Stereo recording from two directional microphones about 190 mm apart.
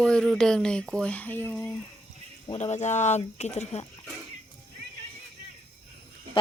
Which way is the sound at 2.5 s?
35° left (ahead or behind).